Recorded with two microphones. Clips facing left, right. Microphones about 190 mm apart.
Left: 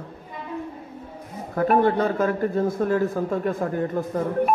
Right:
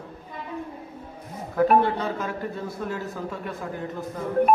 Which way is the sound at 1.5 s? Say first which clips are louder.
Left 1 dB; 50° left (ahead or behind).